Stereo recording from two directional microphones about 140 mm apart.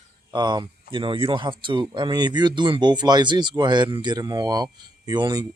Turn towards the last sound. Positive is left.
turn(degrees=-30)  # may be behind; listen again after turning